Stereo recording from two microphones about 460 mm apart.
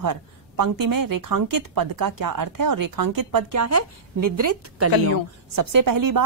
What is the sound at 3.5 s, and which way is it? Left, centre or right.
A woman's voice, right.